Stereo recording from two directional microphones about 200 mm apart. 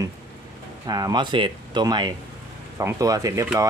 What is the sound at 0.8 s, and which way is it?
A man's voice, 20° right (ahead or behind).